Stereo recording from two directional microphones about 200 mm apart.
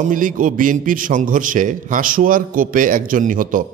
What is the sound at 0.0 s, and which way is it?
A man's voice, 40° right (ahead or behind).